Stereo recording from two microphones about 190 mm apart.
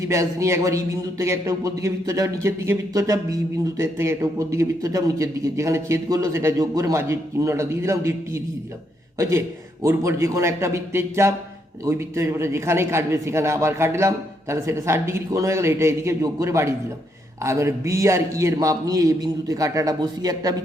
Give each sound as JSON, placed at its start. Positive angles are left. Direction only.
{"t": 0.0, "sound": "a man's voice", "side_deg": -15}